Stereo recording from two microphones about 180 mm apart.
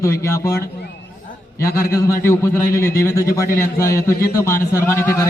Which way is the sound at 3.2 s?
55° left (ahead or behind).